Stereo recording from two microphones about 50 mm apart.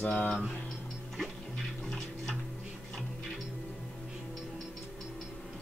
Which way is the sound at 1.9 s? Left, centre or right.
Centre.